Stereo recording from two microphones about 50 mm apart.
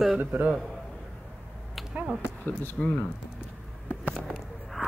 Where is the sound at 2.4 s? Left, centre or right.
Left.